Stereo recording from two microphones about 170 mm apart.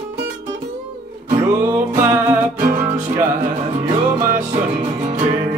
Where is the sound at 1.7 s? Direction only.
15° right (ahead or behind).